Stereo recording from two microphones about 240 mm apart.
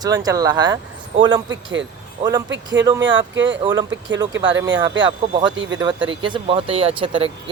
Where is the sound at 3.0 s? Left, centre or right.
Right.